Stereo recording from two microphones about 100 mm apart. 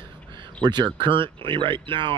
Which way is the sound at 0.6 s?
45° right (ahead or behind).